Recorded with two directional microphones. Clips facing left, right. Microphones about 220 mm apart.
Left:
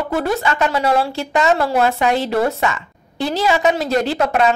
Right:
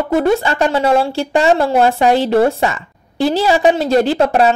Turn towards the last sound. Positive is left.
turn(degrees=-30)  # may be behind; listen again after turning